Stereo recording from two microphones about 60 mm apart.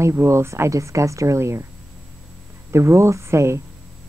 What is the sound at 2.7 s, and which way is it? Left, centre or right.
Speech, right.